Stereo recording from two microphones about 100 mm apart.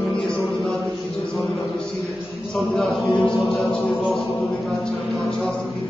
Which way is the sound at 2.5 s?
Centre (ahead or behind).